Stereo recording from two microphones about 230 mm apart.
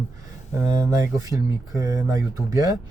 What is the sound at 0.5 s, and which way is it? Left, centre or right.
Speech, centre.